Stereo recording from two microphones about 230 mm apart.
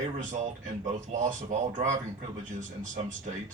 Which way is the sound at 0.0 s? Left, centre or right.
Right.